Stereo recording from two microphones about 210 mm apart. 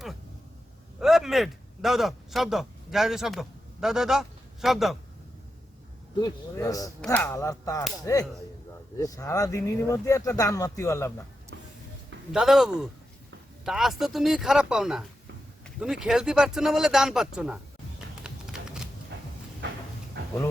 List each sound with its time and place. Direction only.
0.9 s a man's voice: centre (ahead or behind)
6.1 s speech: 15° left (ahead or behind)
11.5 s vehicle: 55° right (ahead or behind)
12.3 s speech: centre (ahead or behind)
18.3 s music: 5° right (ahead or behind)
19.1 s a sound: 55° right (ahead or behind)